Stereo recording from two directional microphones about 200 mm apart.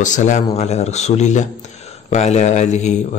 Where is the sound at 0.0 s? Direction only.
35° left (ahead or behind).